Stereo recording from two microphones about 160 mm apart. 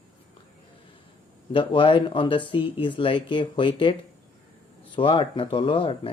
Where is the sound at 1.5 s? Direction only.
30° left (ahead or behind).